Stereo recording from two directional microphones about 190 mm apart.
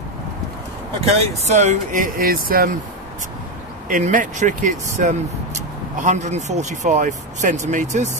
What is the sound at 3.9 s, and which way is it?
Speech, 45° right (ahead or behind).